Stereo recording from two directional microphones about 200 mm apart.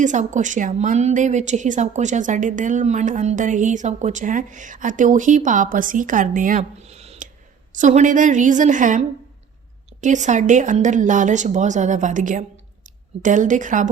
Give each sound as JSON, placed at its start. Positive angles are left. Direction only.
{"t": 0.0, "sound": "a woman's voice", "side_deg": -40}